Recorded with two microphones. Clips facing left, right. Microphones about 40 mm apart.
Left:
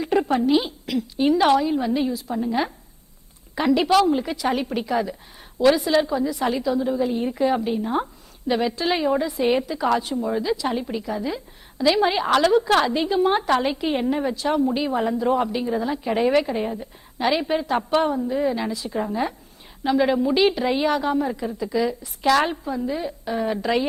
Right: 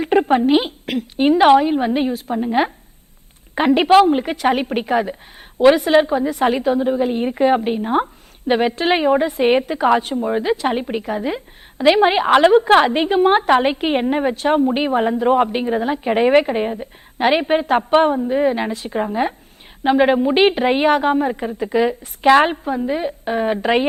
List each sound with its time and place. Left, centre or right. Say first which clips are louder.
0.0 s a woman's voice: right 5 dB; right